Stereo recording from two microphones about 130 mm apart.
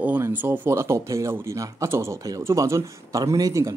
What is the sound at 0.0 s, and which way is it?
A man's voice, 15° right (ahead or behind).